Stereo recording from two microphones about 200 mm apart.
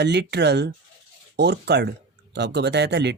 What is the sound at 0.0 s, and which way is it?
Speech, 55° right (ahead or behind).